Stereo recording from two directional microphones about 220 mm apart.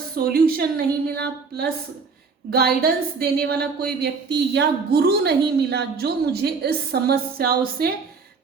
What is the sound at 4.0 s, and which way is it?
A woman's voice, 50° right (ahead or behind).